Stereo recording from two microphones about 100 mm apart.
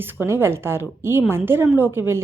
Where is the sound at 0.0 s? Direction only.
20° right (ahead or behind).